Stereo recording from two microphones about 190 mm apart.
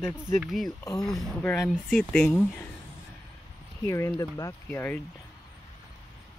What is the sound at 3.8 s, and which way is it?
Speech, 15° left (ahead or behind).